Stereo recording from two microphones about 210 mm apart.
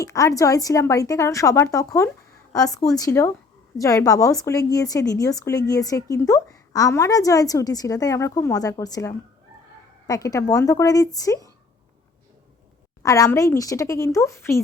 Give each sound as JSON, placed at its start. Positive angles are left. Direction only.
{"t": 0.0, "sound": "a woman's voice", "side_deg": 15}
{"t": 13.0, "sound": "a woman's voice", "side_deg": 15}